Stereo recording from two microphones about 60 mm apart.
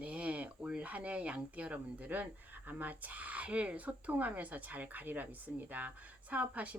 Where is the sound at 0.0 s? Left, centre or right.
Centre.